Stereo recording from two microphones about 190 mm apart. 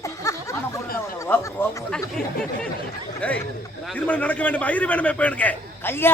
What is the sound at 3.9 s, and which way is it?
A man's voice, 5° left (ahead or behind).